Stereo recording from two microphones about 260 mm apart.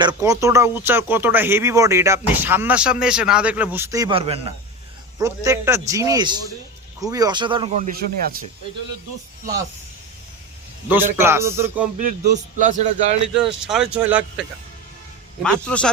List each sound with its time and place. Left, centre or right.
0.0 s speech: centre
10.8 s speech: centre
11.9 s a man's voice: right
13.2 s speech: centre
15.4 s speech: centre